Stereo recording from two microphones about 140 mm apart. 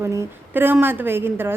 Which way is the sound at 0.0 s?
20° right (ahead or behind).